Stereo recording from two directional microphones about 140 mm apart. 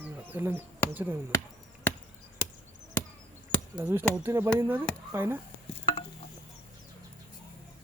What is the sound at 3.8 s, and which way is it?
Speech, 10° right (ahead or behind).